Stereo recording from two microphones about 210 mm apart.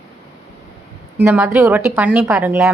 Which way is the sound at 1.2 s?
5° right (ahead or behind).